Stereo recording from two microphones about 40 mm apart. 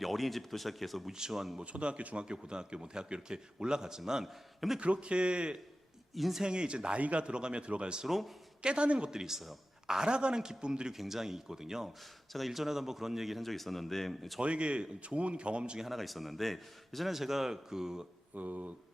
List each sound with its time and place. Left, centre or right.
0.0 s a man's voice: centre
1.6 s a man's voice: right
4.8 s a man's voice: right
6.1 s a man's voice: centre
6.4 s a man's voice: right
8.0 s a man's voice: centre
8.6 s a man's voice: right
9.0 s a man's voice: centre
10.9 s speech: centre
12.3 s a man's voice: centre
14.4 s a man's voice: right
15.8 s a man's voice: centre
17.1 s speech: centre
18.3 s speech: right